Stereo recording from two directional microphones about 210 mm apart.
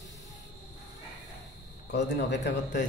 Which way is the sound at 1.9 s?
55° left (ahead or behind).